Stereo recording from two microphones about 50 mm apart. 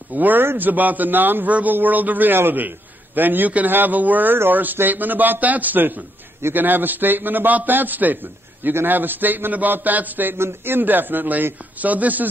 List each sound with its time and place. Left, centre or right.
0.1 s a man's voice: right